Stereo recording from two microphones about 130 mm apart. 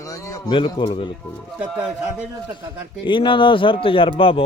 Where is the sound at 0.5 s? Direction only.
40° left (ahead or behind).